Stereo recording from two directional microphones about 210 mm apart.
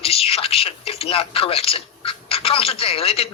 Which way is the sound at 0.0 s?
30° left (ahead or behind).